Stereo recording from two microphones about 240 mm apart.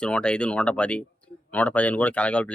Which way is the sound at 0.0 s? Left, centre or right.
Centre.